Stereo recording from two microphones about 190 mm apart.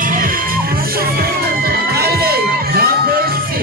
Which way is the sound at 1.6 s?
55° right (ahead or behind).